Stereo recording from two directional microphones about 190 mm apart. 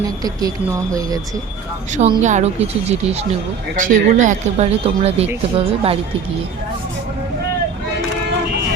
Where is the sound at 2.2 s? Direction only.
40° right (ahead or behind).